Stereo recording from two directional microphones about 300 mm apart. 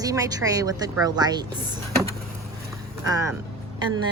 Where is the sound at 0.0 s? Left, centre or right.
Centre.